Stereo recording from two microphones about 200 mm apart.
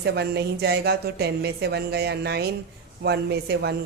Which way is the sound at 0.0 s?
55° right (ahead or behind).